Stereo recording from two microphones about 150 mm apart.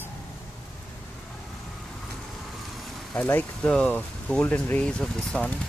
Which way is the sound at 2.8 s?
10° left (ahead or behind).